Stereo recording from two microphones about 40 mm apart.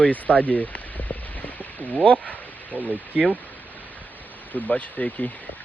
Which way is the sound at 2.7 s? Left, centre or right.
Right.